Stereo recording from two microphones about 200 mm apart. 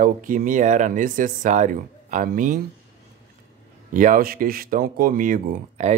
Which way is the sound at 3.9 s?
40° right (ahead or behind).